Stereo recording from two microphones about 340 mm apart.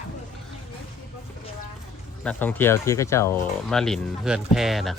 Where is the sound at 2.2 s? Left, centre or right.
Centre.